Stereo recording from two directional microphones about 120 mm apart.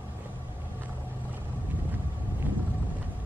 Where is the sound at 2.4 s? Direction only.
15° right (ahead or behind).